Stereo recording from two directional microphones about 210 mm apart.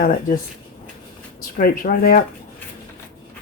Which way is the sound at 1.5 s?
40° left (ahead or behind).